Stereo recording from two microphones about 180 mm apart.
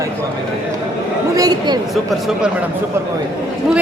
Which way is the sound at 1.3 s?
20° right (ahead or behind).